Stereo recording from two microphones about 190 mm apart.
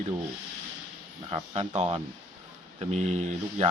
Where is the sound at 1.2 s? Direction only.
30° right (ahead or behind).